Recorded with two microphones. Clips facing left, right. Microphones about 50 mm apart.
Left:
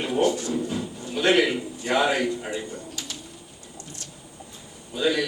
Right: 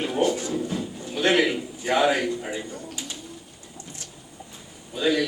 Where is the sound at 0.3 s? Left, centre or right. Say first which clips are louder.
Left 1 dB; right.